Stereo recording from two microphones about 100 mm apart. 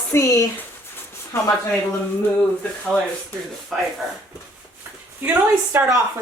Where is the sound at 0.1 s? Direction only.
30° left (ahead or behind).